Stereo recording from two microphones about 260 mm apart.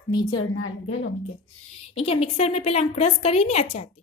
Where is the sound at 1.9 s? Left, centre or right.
Left.